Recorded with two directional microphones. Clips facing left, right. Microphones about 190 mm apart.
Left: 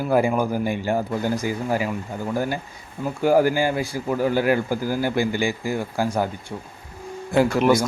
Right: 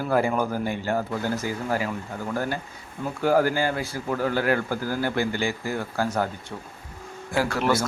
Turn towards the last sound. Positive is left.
turn(degrees=15)  # may be behind; listen again after turning